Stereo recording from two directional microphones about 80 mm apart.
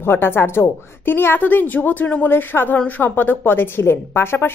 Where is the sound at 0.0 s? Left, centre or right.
Left.